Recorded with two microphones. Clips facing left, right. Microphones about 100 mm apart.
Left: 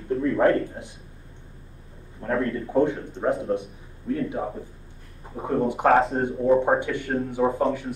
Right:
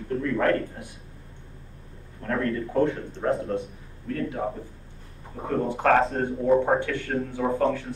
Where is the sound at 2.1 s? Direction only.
20° left (ahead or behind).